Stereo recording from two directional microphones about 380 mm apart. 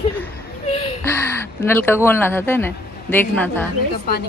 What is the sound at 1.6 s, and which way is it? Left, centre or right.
Speech, centre.